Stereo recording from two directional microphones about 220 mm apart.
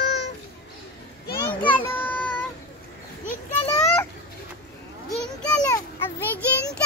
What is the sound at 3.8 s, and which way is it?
Children playing, 5° left (ahead or behind).